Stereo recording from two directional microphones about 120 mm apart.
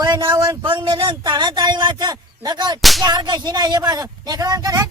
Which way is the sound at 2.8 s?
Centre (ahead or behind).